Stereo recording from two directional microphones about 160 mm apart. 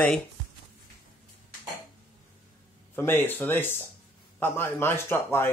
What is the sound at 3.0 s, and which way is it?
Speech, 15° left (ahead or behind).